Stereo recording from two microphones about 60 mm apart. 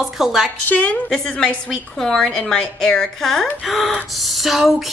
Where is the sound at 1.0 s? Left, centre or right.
Centre.